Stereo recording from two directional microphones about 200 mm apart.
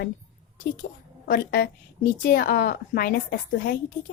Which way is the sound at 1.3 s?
50° left (ahead or behind).